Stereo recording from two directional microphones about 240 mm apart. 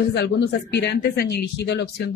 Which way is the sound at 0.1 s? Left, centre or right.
Left.